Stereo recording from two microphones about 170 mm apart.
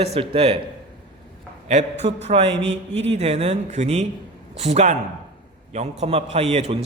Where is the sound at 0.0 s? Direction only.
35° right (ahead or behind).